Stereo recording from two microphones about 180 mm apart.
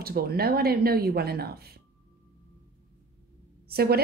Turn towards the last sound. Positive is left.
turn(degrees=-60)  # may be behind; listen again after turning